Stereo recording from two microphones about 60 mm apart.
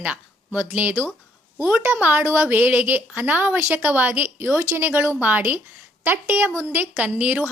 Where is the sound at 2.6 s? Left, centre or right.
Right.